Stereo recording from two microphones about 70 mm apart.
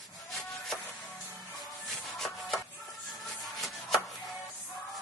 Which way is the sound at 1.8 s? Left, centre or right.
Centre.